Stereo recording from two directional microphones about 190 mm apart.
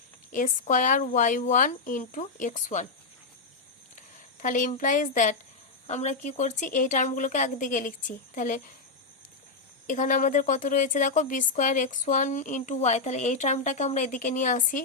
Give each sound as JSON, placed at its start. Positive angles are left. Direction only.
{"t": 0.3, "sound": "speech", "side_deg": 40}
{"t": 4.4, "sound": "speech", "side_deg": 45}
{"t": 9.8, "sound": "speech", "side_deg": 40}